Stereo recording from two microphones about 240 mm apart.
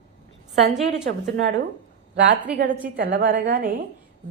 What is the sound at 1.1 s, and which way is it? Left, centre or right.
Speech, right.